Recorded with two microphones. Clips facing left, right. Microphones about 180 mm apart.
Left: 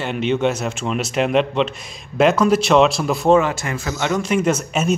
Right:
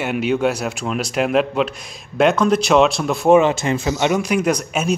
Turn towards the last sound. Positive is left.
turn(degrees=5)  # may be behind; listen again after turning